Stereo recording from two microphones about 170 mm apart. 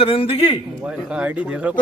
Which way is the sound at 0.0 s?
35° left (ahead or behind).